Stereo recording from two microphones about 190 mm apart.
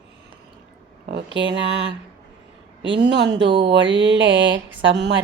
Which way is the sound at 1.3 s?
70° right (ahead or behind).